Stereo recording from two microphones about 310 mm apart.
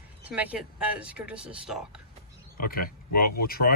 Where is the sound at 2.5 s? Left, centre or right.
Left.